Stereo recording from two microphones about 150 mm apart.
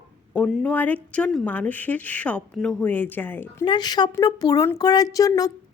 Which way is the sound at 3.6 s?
30° left (ahead or behind).